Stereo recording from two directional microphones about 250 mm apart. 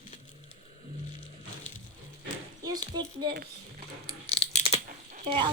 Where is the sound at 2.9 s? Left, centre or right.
Centre.